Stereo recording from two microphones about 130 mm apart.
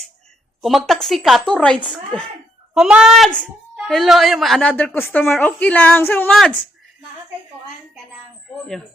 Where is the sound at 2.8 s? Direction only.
5° right (ahead or behind); by 6.3 s 15° left (ahead or behind).